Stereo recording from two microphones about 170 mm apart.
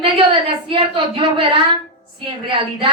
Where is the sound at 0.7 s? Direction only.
30° right (ahead or behind).